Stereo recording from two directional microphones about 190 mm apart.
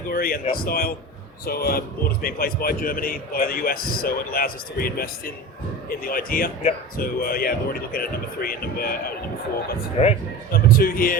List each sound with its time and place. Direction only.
0.1 s a man's voice: 50° left (ahead or behind)
10.0 s a man's voice: 35° left (ahead or behind)
10.5 s a man's voice: 50° left (ahead or behind)